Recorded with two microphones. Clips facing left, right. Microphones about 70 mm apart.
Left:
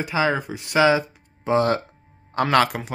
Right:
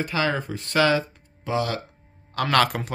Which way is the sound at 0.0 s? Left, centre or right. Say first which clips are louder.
Left 3 dB; centre.